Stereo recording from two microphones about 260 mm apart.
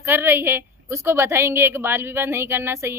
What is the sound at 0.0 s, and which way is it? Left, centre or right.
A woman's voice, centre.